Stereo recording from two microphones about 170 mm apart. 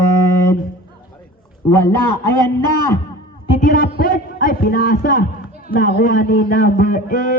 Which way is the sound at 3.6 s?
55° left (ahead or behind).